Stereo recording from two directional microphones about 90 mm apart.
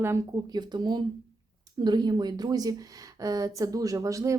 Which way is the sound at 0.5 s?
50° right (ahead or behind).